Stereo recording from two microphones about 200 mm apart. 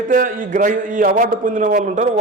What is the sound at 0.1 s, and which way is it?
A man's voice, 45° right (ahead or behind).